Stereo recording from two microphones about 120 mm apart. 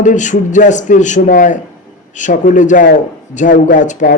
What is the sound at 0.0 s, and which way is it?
A man's voice, 90° left.